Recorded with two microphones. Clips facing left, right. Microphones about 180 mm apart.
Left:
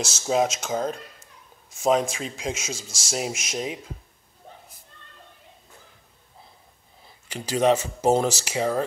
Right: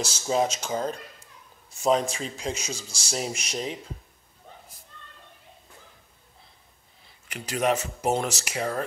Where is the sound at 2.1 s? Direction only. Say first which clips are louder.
Left 1 dB; 5° left (ahead or behind).